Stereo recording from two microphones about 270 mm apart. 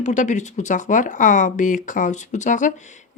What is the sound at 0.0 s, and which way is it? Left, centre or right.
Speech, left.